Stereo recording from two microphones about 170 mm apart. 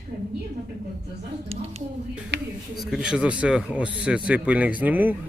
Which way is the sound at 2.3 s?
90° right.